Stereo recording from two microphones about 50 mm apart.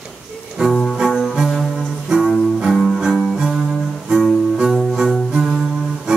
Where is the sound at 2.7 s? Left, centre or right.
Centre.